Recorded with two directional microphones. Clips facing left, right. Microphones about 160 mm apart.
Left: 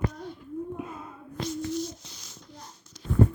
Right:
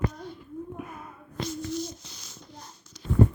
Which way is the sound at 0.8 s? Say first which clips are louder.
Left 2 dB; 25° left (ahead or behind).